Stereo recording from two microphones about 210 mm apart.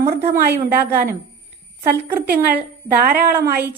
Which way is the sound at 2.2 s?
45° right (ahead or behind).